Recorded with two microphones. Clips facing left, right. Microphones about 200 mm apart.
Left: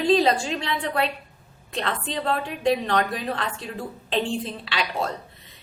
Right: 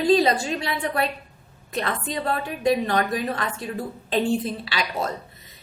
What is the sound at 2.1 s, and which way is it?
Speech, 10° right (ahead or behind).